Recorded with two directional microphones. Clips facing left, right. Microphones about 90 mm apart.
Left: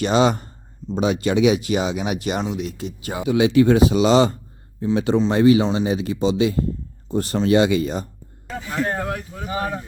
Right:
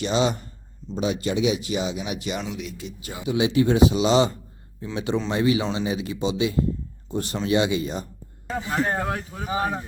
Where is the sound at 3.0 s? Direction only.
60° left (ahead or behind).